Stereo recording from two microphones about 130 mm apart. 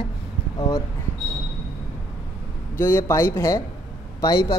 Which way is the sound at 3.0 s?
25° left (ahead or behind).